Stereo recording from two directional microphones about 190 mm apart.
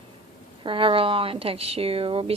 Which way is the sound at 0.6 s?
25° right (ahead or behind).